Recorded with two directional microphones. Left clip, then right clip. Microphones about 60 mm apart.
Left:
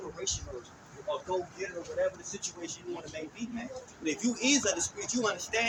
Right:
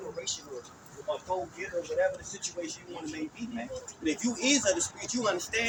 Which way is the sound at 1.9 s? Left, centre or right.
Left.